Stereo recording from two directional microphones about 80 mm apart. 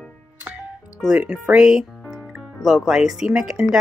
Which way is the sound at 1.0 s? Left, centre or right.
Centre.